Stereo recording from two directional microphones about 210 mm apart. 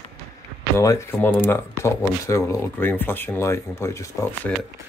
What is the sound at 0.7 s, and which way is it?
Speech, 15° left (ahead or behind).